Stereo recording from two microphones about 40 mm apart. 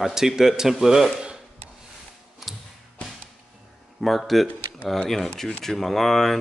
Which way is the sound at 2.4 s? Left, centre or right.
Centre.